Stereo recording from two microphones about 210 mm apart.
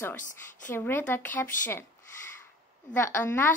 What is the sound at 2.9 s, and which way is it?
Speech, 10° left (ahead or behind).